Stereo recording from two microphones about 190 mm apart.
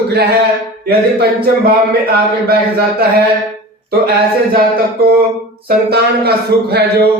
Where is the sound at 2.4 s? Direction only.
55° right (ahead or behind).